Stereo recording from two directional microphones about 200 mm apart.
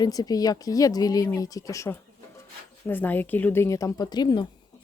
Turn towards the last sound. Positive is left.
turn(degrees=20)  # may be behind; listen again after turning